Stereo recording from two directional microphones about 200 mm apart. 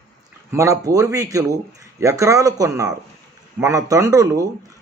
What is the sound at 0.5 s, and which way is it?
A man's voice, 15° right (ahead or behind).